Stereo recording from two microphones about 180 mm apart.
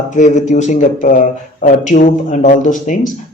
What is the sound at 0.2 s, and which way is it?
Speech, 40° left (ahead or behind).